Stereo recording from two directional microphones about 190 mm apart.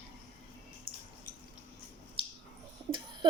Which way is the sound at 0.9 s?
30° right (ahead or behind).